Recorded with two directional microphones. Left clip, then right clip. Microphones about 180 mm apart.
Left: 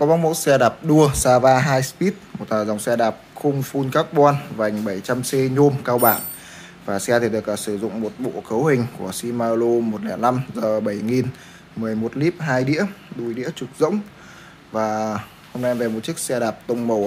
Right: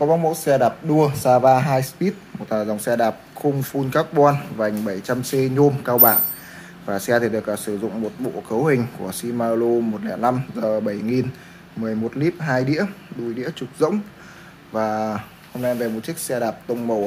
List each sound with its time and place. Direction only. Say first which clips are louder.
0.0 s speech: left 1 dB; 25° left (ahead or behind)